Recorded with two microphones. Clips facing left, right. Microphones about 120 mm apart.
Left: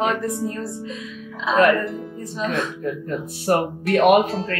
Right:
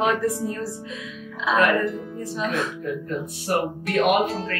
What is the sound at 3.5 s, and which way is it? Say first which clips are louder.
Speech: left 4 dB; 45° left (ahead or behind).